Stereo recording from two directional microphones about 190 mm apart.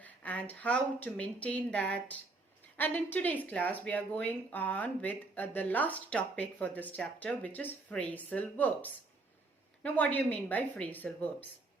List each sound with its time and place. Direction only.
0.0 s speech: 10° left (ahead or behind)